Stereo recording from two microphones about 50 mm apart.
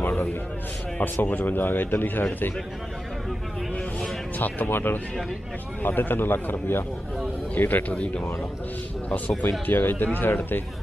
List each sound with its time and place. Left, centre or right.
0.0 s a sound: left
1.2 s a man's voice: left
4.4 s a man's voice: left
9.5 s a man's voice: left